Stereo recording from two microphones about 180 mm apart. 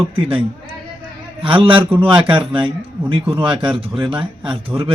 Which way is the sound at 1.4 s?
30° right (ahead or behind).